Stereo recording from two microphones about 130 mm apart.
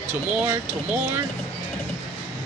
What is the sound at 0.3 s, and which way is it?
Speech, 15° right (ahead or behind).